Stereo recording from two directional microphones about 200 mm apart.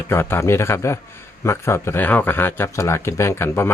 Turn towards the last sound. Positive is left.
turn(degrees=10)  # may be behind; listen again after turning